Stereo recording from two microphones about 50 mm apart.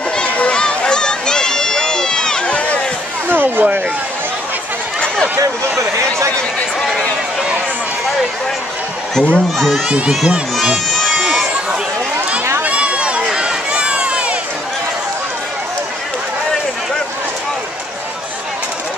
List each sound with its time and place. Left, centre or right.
0.2 s run: centre
2.4 s run: left
3.3 s a sound: right
5.8 s speech: right
9.3 s speech: centre
9.8 s speech: right
10.5 s music: centre
12.6 s run: right